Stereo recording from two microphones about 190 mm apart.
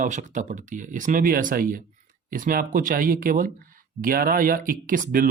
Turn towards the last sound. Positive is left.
turn(degrees=-45)  # may be behind; listen again after turning